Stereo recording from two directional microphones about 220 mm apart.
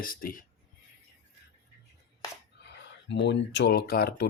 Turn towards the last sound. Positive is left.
turn(degrees=45)  # may be behind; listen again after turning